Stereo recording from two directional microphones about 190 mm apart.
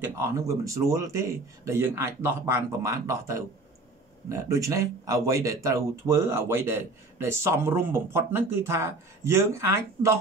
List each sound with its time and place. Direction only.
0.0 s speech: 15° right (ahead or behind)